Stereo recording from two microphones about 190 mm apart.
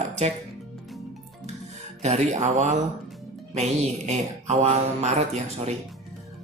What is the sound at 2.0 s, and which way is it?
Speech, 35° right (ahead or behind).